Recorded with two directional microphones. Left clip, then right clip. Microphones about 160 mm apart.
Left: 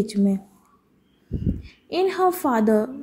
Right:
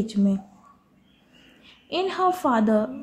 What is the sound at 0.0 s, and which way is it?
Speech, 25° left (ahead or behind).